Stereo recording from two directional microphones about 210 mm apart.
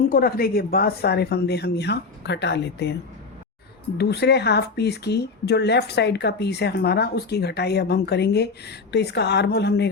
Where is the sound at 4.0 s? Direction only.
50° left (ahead or behind).